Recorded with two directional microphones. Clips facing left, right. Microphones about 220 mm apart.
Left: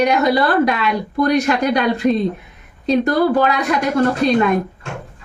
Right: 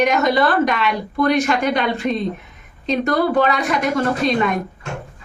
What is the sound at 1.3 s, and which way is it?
Speech, 35° left (ahead or behind).